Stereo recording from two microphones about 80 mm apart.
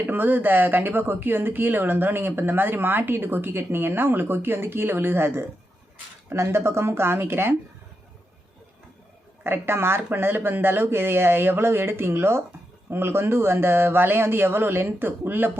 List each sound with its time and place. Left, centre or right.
0.0 s speech: right
9.4 s speech: right